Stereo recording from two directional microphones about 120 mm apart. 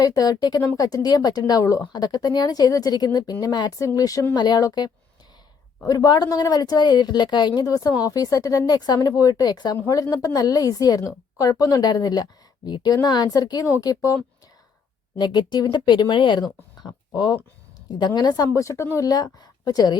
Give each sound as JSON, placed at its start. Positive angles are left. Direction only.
{"t": 0.0, "sound": "a woman's voice", "side_deg": 30}
{"t": 15.2, "sound": "a woman's voice", "side_deg": 35}